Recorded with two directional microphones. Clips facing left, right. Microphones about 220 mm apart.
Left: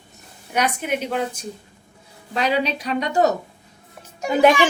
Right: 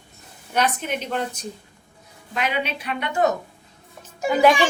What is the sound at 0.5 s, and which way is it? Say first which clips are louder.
Speech: left 1 dB; 10° left (ahead or behind).